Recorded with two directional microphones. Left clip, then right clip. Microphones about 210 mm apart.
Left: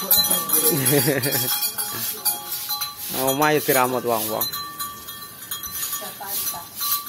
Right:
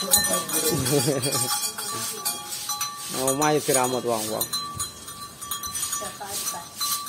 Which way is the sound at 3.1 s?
15° left (ahead or behind).